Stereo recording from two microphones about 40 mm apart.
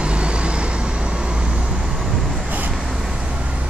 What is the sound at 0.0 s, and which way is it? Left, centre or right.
Vehicle, right.